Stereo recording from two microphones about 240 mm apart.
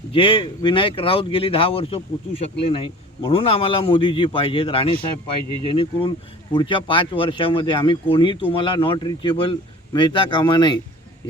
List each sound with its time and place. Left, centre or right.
0.1 s speech: left